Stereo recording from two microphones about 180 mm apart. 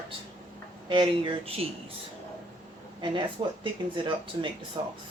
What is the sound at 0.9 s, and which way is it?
Speech, 25° right (ahead or behind).